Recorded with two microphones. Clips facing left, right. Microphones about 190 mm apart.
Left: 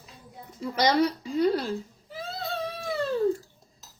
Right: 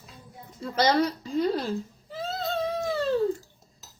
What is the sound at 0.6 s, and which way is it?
Speech, 15° left (ahead or behind).